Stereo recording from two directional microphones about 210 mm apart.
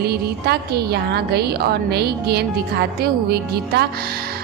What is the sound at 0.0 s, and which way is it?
A woman's voice, 50° right (ahead or behind).